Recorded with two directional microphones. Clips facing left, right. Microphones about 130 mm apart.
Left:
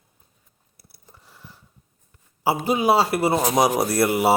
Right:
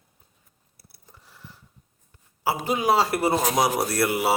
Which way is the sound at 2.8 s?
10° left (ahead or behind).